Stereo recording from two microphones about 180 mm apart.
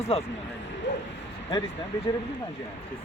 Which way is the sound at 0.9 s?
80° left.